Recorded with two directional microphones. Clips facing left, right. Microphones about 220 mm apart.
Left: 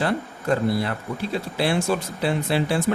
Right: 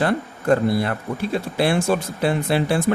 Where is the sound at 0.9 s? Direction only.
55° right (ahead or behind).